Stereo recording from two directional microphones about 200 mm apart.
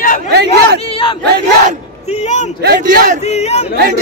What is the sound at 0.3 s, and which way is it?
Chatter, 55° right (ahead or behind).